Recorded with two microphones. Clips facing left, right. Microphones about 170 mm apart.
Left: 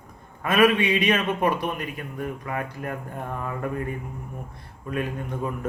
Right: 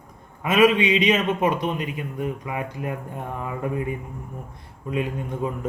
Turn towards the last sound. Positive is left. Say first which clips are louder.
# right 2 dB
turn(degrees=-20)  # may be behind; listen again after turning